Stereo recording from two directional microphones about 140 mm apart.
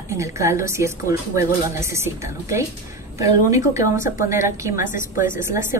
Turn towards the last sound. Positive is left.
turn(degrees=-20)  # may be behind; listen again after turning